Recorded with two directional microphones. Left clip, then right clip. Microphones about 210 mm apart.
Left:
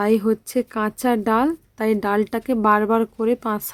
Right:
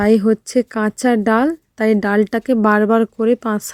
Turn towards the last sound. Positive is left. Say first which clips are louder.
# right 4 dB
turn(degrees=-20)  # may be behind; listen again after turning